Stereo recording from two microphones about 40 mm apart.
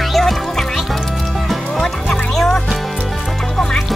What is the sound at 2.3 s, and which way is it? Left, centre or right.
Music, centre.